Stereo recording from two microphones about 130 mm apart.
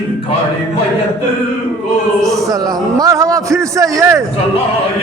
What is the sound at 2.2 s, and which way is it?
Speech, centre (ahead or behind).